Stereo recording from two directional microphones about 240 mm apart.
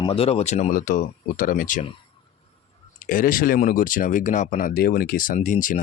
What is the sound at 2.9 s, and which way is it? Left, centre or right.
Speech, left.